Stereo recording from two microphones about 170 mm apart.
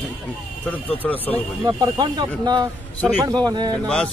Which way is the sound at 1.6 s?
25° right (ahead or behind).